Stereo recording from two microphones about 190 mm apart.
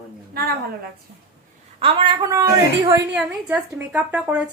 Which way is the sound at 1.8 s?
25° right (ahead or behind).